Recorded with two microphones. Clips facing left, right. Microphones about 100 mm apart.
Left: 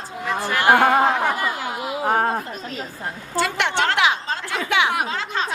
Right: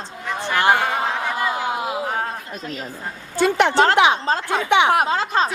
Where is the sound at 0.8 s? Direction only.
55° left (ahead or behind).